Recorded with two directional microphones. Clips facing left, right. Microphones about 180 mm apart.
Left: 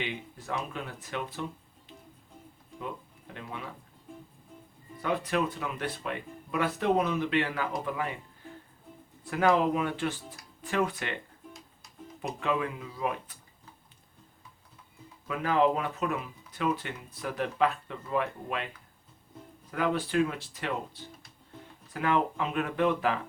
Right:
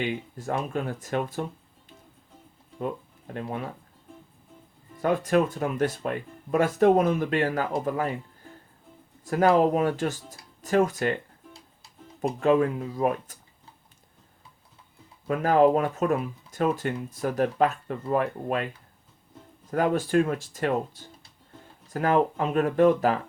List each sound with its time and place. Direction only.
0.0 s speech: 45° right (ahead or behind)
3.3 s speech: 45° right (ahead or behind)
5.0 s speech: 45° right (ahead or behind)
9.2 s speech: 40° right (ahead or behind)
10.6 s music: 40° right (ahead or behind)
12.2 s speech: 45° right (ahead or behind)
15.3 s speech: 45° right (ahead or behind)
19.7 s speech: 45° right (ahead or behind)